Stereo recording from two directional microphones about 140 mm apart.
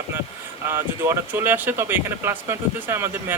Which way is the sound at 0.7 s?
20° right (ahead or behind).